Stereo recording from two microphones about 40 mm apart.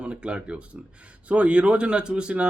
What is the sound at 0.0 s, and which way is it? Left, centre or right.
Speech, right.